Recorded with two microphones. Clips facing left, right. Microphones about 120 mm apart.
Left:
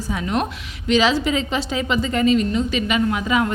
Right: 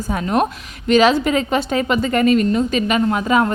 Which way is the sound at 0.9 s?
55° right (ahead or behind).